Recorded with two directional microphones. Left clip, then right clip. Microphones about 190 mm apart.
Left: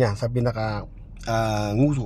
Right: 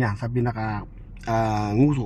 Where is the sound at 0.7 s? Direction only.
Centre (ahead or behind).